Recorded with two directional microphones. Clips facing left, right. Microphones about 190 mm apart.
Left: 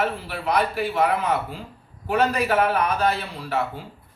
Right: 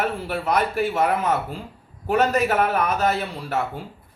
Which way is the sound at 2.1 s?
45° right (ahead or behind).